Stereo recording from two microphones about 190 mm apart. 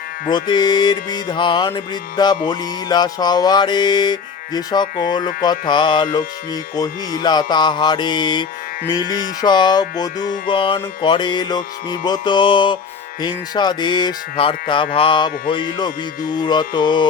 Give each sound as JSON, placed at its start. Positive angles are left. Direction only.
{"t": 0.3, "sound": "music", "side_deg": 25}